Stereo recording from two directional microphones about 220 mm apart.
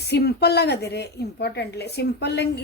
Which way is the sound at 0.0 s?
50° left (ahead or behind).